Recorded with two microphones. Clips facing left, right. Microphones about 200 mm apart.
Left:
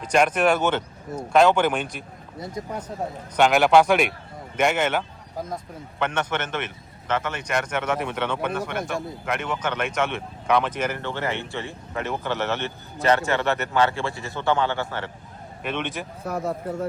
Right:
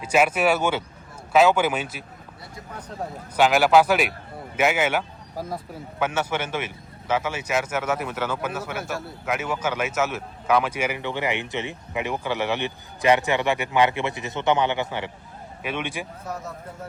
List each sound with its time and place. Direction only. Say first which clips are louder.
0.0 s speech: left 1 dB; 5° right (ahead or behind)
3.3 s speech: even; 5° right (ahead or behind)
16.2 s speech: left 7 dB; 60° left (ahead or behind)